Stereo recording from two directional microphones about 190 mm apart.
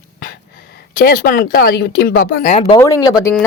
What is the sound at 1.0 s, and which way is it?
Speech, 50° left (ahead or behind).